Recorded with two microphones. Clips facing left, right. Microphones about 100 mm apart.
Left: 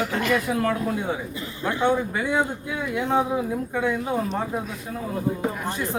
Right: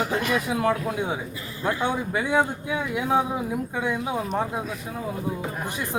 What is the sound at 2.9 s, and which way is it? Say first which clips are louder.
Speech: left 1 dB; 5° right (ahead or behind).